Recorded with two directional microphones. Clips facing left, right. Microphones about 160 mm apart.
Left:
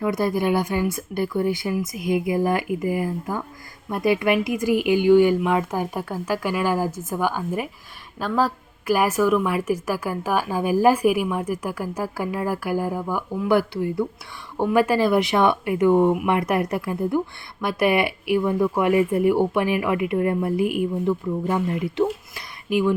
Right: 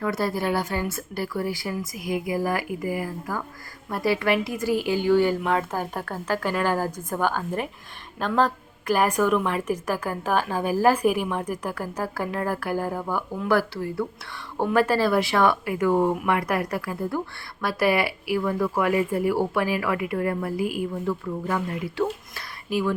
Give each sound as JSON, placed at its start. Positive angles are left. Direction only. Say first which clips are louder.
{"t": 0.0, "sound": "a woman's voice", "louder": "left 4 dB", "side_deg": 15}